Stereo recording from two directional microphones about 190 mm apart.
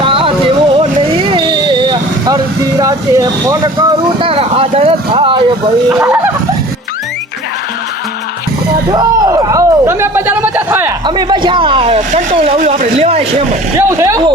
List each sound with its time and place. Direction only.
0.0 s music: 30° right (ahead or behind)
5.9 s speech: 5° right (ahead or behind)
8.9 s a sound: 20° right (ahead or behind)
11.0 s speech: 25° right (ahead or behind)
13.7 s speech: 15° right (ahead or behind)